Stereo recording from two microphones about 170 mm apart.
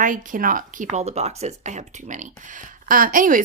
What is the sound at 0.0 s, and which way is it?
Speech, 50° right (ahead or behind).